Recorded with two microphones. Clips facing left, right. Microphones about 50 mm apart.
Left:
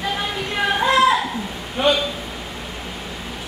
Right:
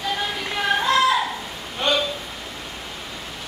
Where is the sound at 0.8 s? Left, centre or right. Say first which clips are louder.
Left 4 dB; centre.